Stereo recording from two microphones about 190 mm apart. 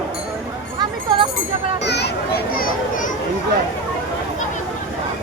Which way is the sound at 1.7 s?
60° left (ahead or behind).